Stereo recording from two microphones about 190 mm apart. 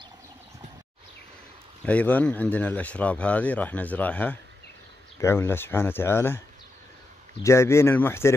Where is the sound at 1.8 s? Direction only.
10° left (ahead or behind).